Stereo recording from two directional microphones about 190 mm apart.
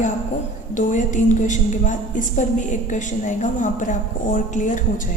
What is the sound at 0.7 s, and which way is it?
A woman's voice, 40° left (ahead or behind).